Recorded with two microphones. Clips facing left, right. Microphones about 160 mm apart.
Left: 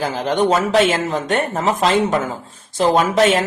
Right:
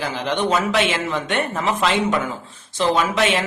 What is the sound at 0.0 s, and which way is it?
Speech, 40° left (ahead or behind).